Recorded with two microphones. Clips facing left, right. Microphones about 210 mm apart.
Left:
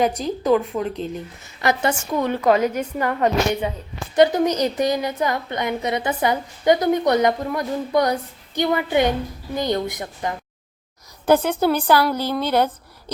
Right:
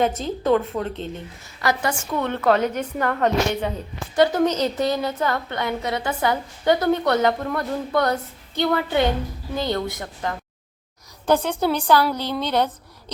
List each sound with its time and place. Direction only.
0.4 s a woman's voice: 10° left (ahead or behind)
1.6 s a woman's voice: 20° left (ahead or behind)
11.3 s a woman's voice: 5° left (ahead or behind)